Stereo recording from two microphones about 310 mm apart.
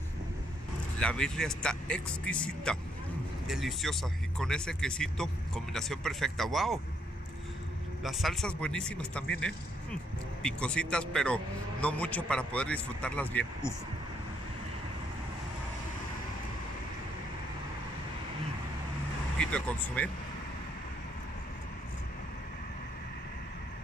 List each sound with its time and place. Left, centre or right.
0.9 s speech: centre
8.0 s speech: centre
19.3 s speech: centre